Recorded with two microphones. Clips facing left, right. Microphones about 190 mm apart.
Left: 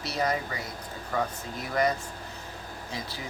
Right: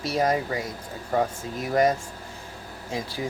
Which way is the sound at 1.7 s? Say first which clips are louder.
Right 5 dB; 45° right (ahead or behind).